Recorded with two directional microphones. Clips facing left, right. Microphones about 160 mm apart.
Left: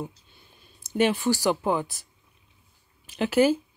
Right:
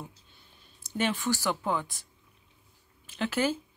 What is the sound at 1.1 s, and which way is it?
Speech, 35° left (ahead or behind).